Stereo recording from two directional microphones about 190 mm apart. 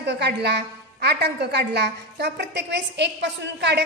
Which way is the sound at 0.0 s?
65° right (ahead or behind).